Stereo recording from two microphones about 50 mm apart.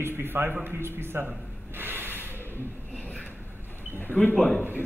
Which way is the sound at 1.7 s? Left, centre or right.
Right.